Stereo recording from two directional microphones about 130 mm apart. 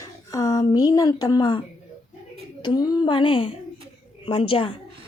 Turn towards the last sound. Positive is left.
turn(degrees=45)  # may be behind; listen again after turning